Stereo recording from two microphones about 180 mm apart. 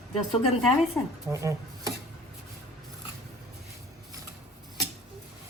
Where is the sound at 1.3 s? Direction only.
15° right (ahead or behind).